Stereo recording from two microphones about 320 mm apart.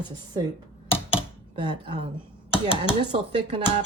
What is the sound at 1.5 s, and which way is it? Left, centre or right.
Speech, centre.